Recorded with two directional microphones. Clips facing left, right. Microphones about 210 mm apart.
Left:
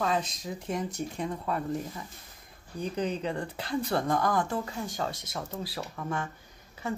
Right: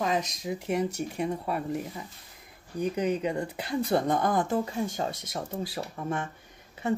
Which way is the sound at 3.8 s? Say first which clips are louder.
Right 3 dB; 25° right (ahead or behind).